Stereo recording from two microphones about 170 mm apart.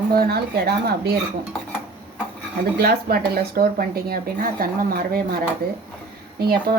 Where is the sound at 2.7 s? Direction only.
65° right (ahead or behind).